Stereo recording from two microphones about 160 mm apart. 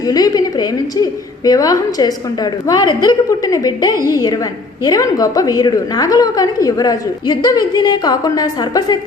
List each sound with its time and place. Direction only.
0.0 s a woman's voice: 25° left (ahead or behind)